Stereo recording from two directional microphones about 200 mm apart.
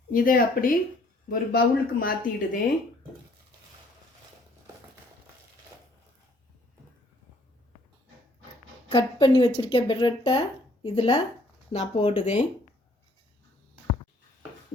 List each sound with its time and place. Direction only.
0.1 s speech: 45° left (ahead or behind)
8.9 s speech: 25° left (ahead or behind)